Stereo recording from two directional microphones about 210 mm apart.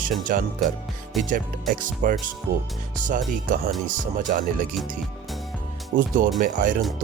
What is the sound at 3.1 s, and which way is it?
Speech, 40° right (ahead or behind).